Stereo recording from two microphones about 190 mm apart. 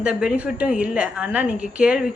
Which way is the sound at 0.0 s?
5° right (ahead or behind).